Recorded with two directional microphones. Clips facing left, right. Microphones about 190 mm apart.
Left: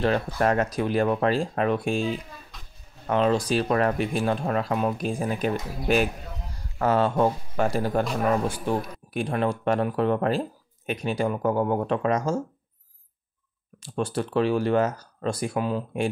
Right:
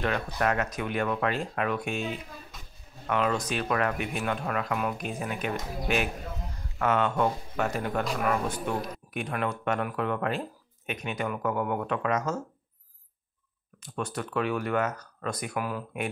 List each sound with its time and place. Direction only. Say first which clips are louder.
0.4 s speech: left 4 dB; 30° left (ahead or behind)
13.8 s speech: left 6 dB; 30° left (ahead or behind)